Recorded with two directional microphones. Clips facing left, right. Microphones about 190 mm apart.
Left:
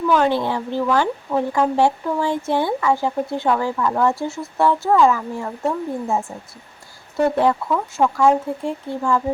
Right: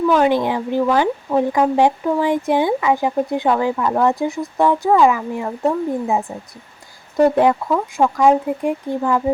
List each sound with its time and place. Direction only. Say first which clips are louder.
0.1 s speech: even; 15° right (ahead or behind)